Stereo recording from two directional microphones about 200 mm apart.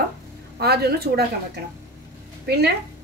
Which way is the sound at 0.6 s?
50° right (ahead or behind).